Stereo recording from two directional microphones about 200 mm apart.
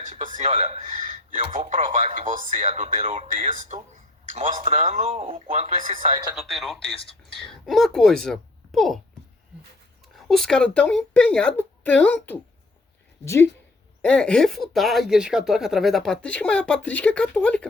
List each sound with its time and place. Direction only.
0.0 s speech: 40° right (ahead or behind)
5.0 s speech: 30° right (ahead or behind)
6.3 s speech: centre (ahead or behind)
7.0 s speech: 25° left (ahead or behind)
7.6 s speech: centre (ahead or behind)
10.2 s speech: centre (ahead or behind)